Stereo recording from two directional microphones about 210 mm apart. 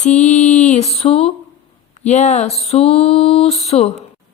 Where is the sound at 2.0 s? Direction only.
35° left (ahead or behind).